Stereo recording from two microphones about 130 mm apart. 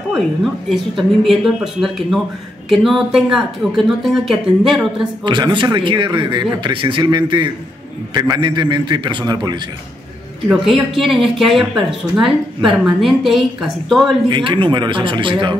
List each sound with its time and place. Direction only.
0.1 s speech: centre (ahead or behind)
5.2 s a man's voice: 35° right (ahead or behind)
10.5 s speech: centre (ahead or behind)
14.3 s a man's voice: 40° right (ahead or behind)